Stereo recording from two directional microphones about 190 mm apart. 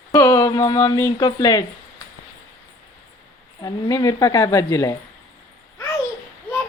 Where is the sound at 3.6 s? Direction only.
20° left (ahead or behind).